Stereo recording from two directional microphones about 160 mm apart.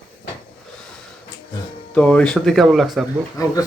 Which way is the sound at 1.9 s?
5° left (ahead or behind).